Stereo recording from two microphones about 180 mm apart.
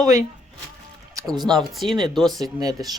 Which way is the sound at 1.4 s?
25° right (ahead or behind).